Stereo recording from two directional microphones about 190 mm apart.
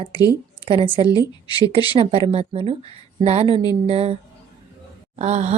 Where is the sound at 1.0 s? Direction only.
20° left (ahead or behind).